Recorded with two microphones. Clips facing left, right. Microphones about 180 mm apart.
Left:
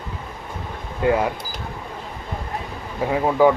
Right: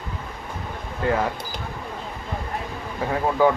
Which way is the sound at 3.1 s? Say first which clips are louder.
Left 3 dB; 10° left (ahead or behind).